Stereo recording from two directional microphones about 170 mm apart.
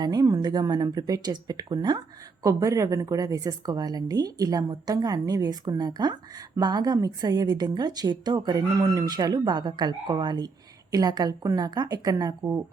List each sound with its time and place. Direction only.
0.0 s a woman's voice: 20° right (ahead or behind)